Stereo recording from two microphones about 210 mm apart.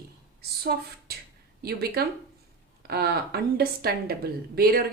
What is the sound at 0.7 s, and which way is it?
A woman's voice, 50° right (ahead or behind).